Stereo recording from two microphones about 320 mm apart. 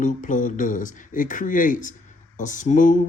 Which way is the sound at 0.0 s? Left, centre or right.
Left.